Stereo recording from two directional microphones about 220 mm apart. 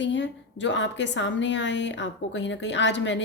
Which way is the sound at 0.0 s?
55° left (ahead or behind).